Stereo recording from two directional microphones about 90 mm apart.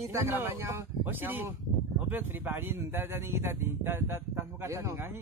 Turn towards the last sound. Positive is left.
turn(degrees=-30)  # may be behind; listen again after turning